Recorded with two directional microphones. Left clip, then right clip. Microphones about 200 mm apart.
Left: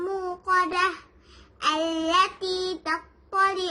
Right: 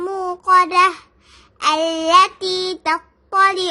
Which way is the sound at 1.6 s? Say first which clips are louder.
Right 7 dB; 60° right (ahead or behind).